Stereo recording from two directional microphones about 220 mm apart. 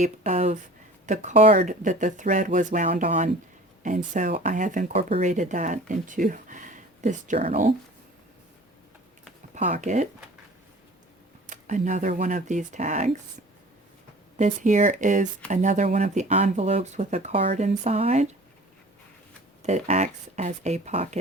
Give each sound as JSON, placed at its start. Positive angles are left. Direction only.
{"t": 0.0, "sound": "speech", "side_deg": -30}
{"t": 9.6, "sound": "speech", "side_deg": -35}
{"t": 11.4, "sound": "speech", "side_deg": -35}
{"t": 14.3, "sound": "speech", "side_deg": -35}
{"t": 19.6, "sound": "speech", "side_deg": -30}